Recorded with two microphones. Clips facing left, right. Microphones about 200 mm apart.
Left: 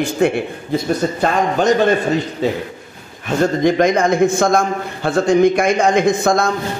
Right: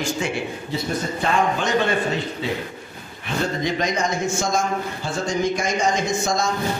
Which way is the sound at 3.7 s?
50° left (ahead or behind).